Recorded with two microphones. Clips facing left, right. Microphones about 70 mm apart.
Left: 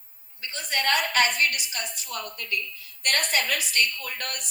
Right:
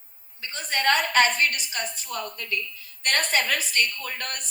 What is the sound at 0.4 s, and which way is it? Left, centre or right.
A woman's voice, right.